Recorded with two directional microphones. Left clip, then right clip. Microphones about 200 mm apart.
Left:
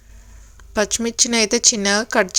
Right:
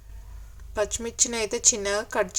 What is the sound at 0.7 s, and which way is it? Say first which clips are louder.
Speech: left 7 dB; 25° left (ahead or behind).